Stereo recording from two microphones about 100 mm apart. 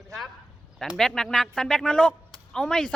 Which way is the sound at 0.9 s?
5° left (ahead or behind).